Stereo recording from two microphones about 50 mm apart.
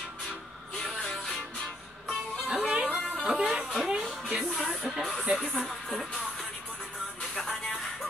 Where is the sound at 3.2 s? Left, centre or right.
Centre.